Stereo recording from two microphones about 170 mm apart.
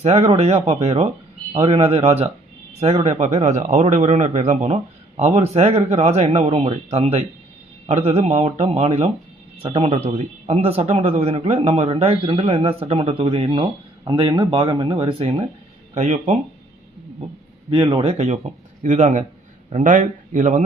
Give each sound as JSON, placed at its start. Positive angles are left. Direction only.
{"t": 0.0, "sound": "a man's voice", "side_deg": -40}
{"t": 16.0, "sound": "speech", "side_deg": -45}
{"t": 17.7, "sound": "a man's voice", "side_deg": -30}